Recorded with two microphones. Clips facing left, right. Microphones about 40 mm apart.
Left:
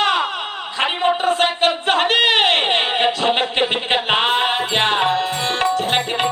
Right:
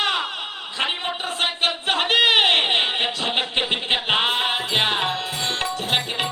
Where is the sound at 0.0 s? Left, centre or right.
Centre.